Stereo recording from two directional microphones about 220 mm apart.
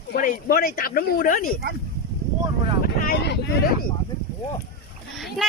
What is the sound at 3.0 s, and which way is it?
Wind noise, 45° left (ahead or behind).